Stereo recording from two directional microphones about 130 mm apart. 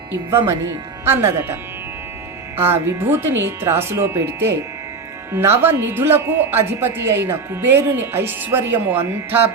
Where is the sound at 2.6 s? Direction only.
20° right (ahead or behind).